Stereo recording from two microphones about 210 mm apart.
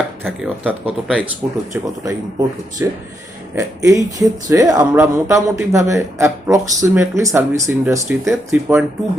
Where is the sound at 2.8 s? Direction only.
15° right (ahead or behind).